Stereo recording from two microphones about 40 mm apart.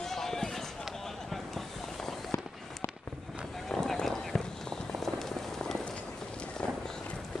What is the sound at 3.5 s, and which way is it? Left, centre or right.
Run, centre.